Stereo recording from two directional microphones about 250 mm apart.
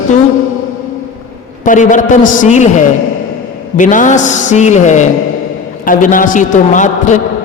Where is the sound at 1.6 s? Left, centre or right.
Left.